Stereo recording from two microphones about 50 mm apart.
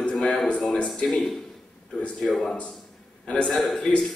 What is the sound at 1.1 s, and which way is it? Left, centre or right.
Speech, centre.